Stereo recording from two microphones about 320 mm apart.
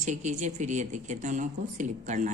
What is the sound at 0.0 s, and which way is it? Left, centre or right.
Speech, right.